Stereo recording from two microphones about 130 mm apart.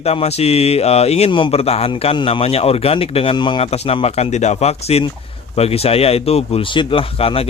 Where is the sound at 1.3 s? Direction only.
40° left (ahead or behind).